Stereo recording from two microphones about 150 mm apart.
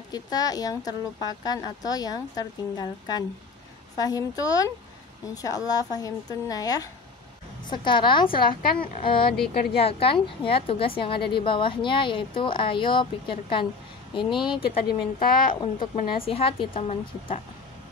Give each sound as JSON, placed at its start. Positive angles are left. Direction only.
{"t": 0.1, "sound": "a woman's voice", "side_deg": 25}
{"t": 8.4, "sound": "a woman's voice", "side_deg": 75}
{"t": 9.8, "sound": "a woman's voice", "side_deg": 40}
{"t": 15.1, "sound": "a woman's voice", "side_deg": 70}
{"t": 16.2, "sound": "a woman's voice", "side_deg": 40}